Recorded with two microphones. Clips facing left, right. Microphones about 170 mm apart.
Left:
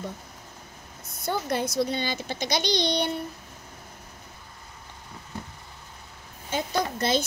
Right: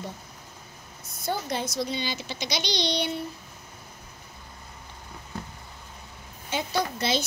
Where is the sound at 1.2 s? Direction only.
60° left (ahead or behind).